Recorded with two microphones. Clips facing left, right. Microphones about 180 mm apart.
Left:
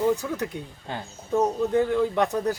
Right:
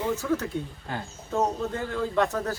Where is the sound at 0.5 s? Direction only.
15° left (ahead or behind).